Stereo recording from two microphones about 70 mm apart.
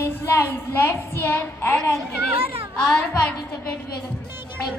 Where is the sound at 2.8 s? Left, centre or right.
Centre.